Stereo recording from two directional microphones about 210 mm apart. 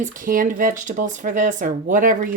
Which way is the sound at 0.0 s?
40° right (ahead or behind).